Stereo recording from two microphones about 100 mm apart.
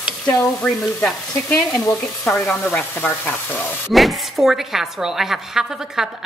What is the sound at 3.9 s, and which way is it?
A woman's voice, centre (ahead or behind).